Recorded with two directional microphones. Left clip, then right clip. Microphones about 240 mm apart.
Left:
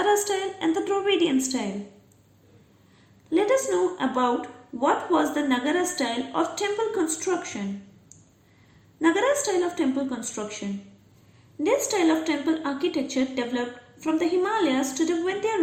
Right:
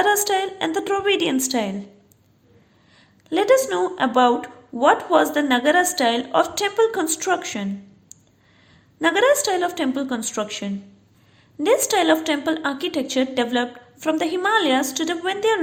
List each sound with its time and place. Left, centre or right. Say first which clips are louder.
0.1 s a woman's voice: right 4 dB; right
3.2 s a woman's voice: right 5 dB; right
9.0 s a woman's voice: right 5 dB; right